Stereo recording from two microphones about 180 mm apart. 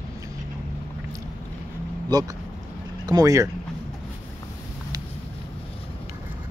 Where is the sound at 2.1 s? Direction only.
20° right (ahead or behind).